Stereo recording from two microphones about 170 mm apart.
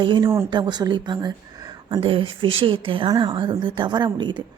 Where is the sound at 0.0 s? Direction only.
25° right (ahead or behind).